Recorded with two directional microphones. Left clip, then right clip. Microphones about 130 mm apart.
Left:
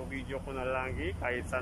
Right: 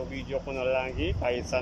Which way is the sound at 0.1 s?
25° right (ahead or behind).